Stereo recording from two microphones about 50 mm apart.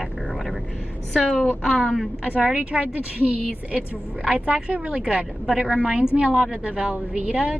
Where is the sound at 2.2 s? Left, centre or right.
Right.